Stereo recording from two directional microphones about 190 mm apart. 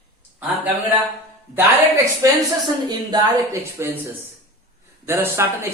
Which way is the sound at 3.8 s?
15° right (ahead or behind).